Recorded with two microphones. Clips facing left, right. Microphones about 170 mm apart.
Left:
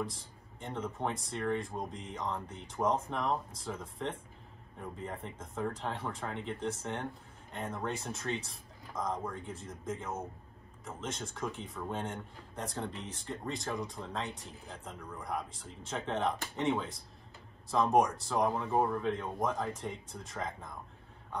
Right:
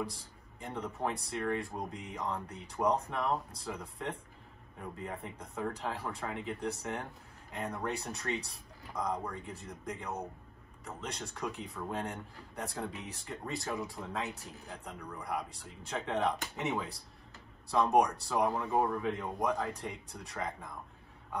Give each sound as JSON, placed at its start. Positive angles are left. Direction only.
{"t": 0.0, "sound": "speech", "side_deg": 0}